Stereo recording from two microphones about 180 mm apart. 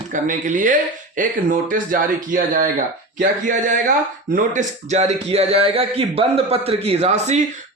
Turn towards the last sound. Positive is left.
turn(degrees=-40)  # may be behind; listen again after turning